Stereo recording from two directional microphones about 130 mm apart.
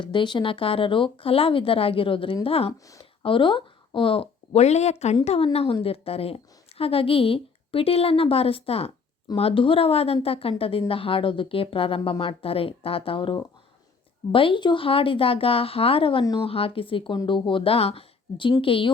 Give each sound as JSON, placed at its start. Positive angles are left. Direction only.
{"t": 0.0, "sound": "a woman's voice", "side_deg": 40}